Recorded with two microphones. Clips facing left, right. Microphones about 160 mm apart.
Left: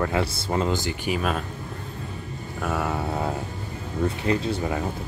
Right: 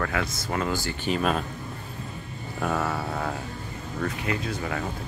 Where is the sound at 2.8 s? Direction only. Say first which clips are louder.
Left 3 dB; 20° left (ahead or behind).